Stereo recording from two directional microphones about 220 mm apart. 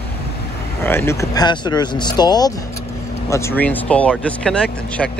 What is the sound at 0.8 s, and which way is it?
Speech, 10° left (ahead or behind).